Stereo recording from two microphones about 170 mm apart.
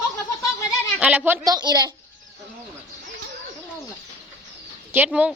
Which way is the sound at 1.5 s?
25° right (ahead or behind).